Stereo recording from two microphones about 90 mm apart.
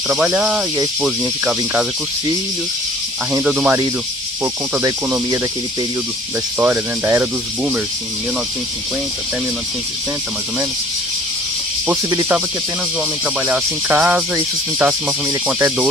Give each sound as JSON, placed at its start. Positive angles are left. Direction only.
{"t": 0.4, "sound": "speech", "side_deg": -10}
{"t": 3.4, "sound": "speech", "side_deg": -15}
{"t": 4.8, "sound": "speech", "side_deg": -35}
{"t": 6.6, "sound": "speech", "side_deg": -25}
{"t": 12.1, "sound": "speech", "side_deg": -30}
{"t": 13.5, "sound": "speech", "side_deg": -15}